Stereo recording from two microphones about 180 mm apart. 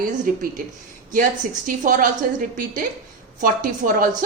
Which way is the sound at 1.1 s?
45° right (ahead or behind).